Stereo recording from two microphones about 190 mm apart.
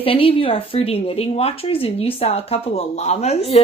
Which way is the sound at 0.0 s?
30° left (ahead or behind).